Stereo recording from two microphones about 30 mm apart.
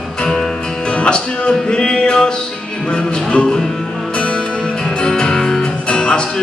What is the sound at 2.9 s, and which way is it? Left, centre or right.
Music, left.